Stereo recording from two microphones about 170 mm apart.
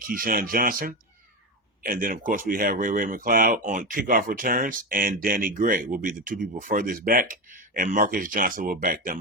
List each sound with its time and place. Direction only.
0.1 s speech: 55° right (ahead or behind)